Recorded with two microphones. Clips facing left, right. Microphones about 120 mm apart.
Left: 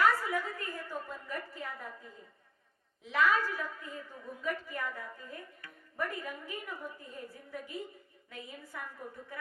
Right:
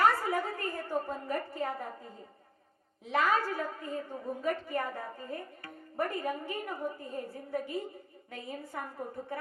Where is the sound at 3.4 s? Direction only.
40° right (ahead or behind).